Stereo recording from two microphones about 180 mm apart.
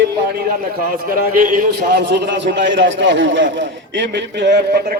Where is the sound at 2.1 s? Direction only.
85° right.